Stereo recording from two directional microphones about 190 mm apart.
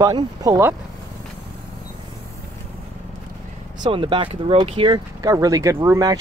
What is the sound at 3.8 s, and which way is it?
Speech, 25° right (ahead or behind).